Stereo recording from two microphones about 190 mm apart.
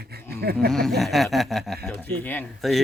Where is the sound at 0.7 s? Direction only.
Centre (ahead or behind).